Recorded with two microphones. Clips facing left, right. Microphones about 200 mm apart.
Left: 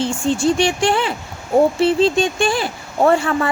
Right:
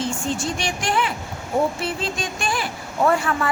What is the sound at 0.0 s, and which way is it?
Speech, 30° left (ahead or behind).